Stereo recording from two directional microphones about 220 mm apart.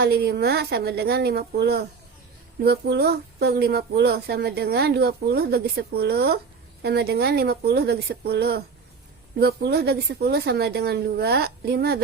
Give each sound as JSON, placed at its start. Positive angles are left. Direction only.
{"t": 0.0, "sound": "speech", "side_deg": -45}